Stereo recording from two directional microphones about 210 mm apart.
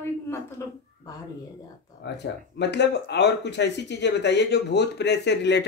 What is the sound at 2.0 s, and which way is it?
Speech, 55° left (ahead or behind).